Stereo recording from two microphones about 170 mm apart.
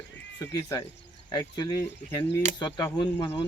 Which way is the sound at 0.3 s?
20° left (ahead or behind).